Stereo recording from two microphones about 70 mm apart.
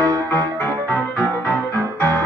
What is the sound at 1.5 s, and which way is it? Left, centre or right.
Music, left.